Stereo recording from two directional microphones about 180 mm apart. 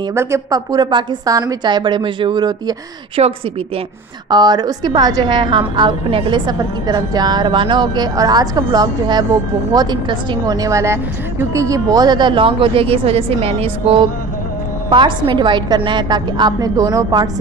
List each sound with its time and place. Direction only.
0.1 s a woman's voice: 15° right (ahead or behind)
3.2 s a woman's voice: 35° right (ahead or behind)
4.3 s a woman's voice: 25° right (ahead or behind)